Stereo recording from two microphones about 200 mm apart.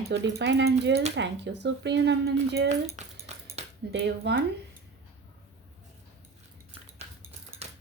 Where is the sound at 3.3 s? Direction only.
35° right (ahead or behind).